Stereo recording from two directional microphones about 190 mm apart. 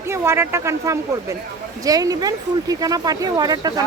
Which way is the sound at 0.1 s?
15° right (ahead or behind).